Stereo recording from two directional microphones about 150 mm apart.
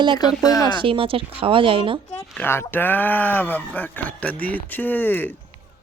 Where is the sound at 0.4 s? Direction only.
25° left (ahead or behind).